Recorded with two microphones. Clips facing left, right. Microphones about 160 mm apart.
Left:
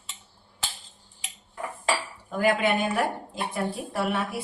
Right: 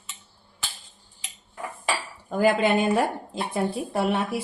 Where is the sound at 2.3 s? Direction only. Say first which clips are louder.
Right 3 dB; 40° right (ahead or behind).